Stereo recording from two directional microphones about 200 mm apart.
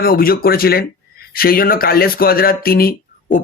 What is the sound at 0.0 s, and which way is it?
Speech, 45° left (ahead or behind).